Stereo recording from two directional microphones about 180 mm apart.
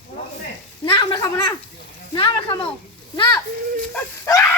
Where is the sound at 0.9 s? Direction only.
25° left (ahead or behind).